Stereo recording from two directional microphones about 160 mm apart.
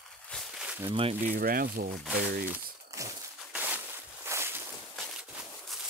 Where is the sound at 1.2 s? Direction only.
65° right (ahead or behind).